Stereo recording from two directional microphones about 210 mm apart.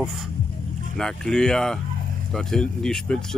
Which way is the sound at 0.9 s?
5° left (ahead or behind).